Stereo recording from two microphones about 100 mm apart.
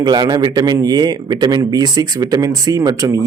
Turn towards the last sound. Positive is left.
turn(degrees=-35)  # may be behind; listen again after turning